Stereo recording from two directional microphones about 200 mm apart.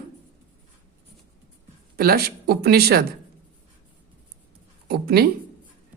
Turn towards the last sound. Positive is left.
turn(degrees=-50)  # may be behind; listen again after turning